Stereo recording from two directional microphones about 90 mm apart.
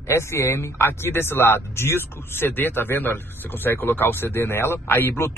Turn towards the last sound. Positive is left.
turn(degrees=25)  # may be behind; listen again after turning